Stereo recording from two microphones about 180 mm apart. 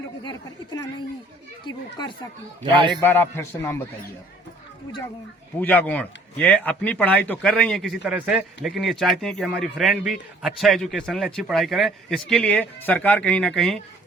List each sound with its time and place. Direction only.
0.3 s a woman's voice: 25° left (ahead or behind)
2.6 s a man's voice: 25° right (ahead or behind)
3.0 s speech: 10° left (ahead or behind)
5.5 s speech: 10° left (ahead or behind)